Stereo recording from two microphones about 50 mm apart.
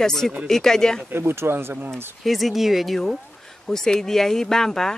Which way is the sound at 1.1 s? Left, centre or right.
Right.